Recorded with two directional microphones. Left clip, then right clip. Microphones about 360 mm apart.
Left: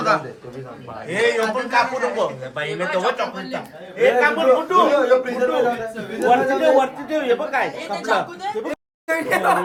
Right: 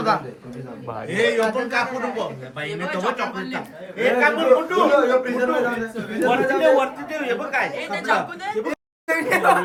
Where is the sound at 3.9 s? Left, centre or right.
Left.